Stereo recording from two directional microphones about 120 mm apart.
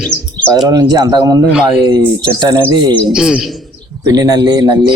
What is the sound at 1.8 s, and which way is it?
Speech, 35° right (ahead or behind).